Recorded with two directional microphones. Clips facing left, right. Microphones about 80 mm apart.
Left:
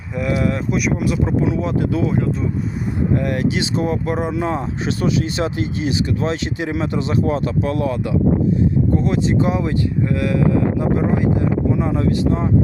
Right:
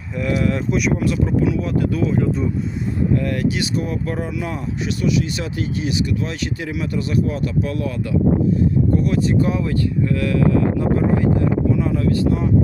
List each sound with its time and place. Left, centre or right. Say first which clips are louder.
0.2 s speech: even; centre
1.2 s speech: even; left
3.2 s speech: left 1 dB; left
9.0 s speech: left 1 dB; left